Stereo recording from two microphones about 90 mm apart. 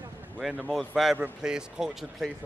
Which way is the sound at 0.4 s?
5° right (ahead or behind).